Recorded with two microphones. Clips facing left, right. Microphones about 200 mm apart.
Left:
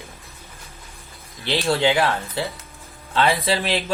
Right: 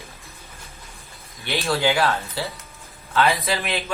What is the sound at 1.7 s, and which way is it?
Speech, 25° left (ahead or behind).